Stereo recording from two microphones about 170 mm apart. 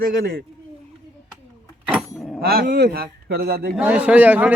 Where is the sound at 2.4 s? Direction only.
65° right (ahead or behind).